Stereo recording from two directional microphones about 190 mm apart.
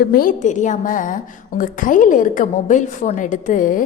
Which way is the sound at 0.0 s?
50° left (ahead or behind).